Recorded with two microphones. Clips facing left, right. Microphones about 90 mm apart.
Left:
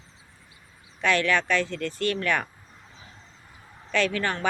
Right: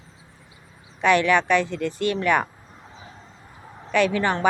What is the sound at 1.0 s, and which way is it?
Speech, 15° right (ahead or behind).